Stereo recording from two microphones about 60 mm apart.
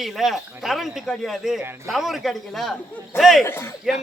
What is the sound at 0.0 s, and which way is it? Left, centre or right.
A man's voice, centre.